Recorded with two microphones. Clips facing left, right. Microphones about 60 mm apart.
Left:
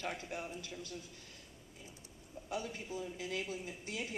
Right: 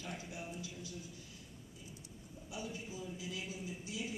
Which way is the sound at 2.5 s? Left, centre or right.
Left.